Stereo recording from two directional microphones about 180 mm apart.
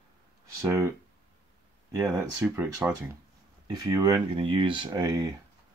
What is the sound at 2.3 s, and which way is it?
Speech, 10° right (ahead or behind).